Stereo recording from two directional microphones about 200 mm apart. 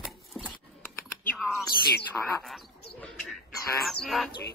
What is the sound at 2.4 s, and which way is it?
Bird, centre (ahead or behind).